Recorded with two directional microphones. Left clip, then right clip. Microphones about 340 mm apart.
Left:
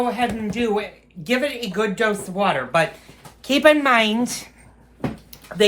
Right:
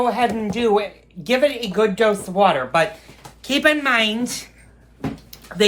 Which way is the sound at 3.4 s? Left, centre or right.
Centre.